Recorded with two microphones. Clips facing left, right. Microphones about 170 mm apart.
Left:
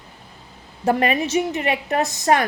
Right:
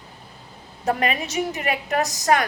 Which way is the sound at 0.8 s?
30° left (ahead or behind).